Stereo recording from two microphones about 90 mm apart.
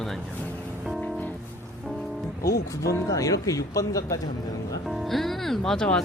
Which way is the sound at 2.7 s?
40° left (ahead or behind).